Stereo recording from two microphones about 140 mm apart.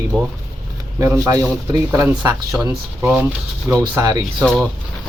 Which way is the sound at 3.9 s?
25° right (ahead or behind).